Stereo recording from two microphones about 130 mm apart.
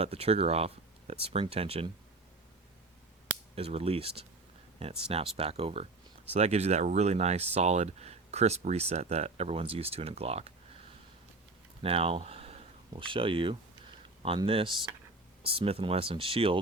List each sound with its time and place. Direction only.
0.0 s speech: 50° right (ahead or behind)
3.5 s speech: 50° right (ahead or behind)
11.8 s speech: 50° right (ahead or behind)